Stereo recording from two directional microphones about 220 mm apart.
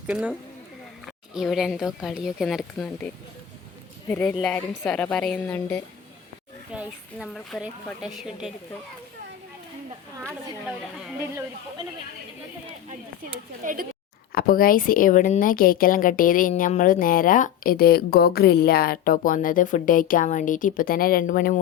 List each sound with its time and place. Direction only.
0.1 s speech: 5° right (ahead or behind)
4.1 s a woman's voice: 5° left (ahead or behind)
6.7 s speech: centre (ahead or behind)
13.3 s speech: 35° right (ahead or behind)
14.3 s speech: 40° left (ahead or behind)